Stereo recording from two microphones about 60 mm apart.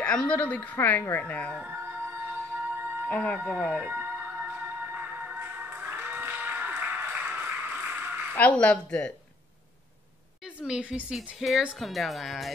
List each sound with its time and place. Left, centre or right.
0.0 s speech: centre; by 1.0 s left
1.2 s speech: left
1.5 s speech: right
1.8 s music: right
3.1 s speech: left
3.9 s music: right
8.4 s speech: left
10.4 s a woman's voice: centre
11.3 s speech: centre